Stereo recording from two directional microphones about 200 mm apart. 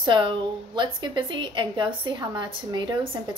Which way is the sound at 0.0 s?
25° right (ahead or behind).